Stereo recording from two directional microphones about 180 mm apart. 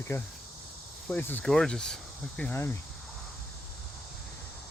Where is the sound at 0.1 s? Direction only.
15° left (ahead or behind).